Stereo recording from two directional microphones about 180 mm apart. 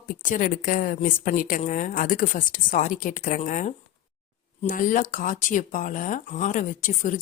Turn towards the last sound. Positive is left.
turn(degrees=45)  # may be behind; listen again after turning